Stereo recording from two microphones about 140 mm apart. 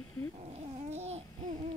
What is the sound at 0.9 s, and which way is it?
Speech, 50° right (ahead or behind).